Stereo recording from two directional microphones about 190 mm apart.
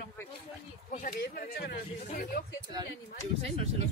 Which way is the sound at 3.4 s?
30° right (ahead or behind).